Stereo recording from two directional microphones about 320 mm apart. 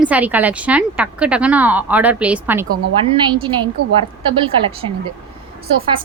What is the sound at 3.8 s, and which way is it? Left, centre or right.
Speech, right.